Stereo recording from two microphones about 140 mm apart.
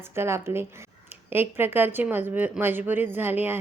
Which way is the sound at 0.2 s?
20° right (ahead or behind).